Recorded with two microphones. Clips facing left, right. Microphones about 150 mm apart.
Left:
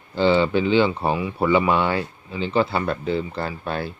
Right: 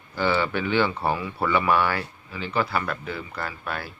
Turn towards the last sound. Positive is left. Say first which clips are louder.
# left 5 dB
turn(degrees=25)  # may be behind; listen again after turning